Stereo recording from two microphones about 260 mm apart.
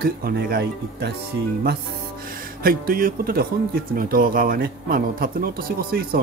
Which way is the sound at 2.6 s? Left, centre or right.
Right.